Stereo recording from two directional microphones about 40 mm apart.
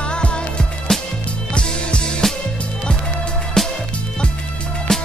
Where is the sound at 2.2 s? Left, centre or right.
Centre.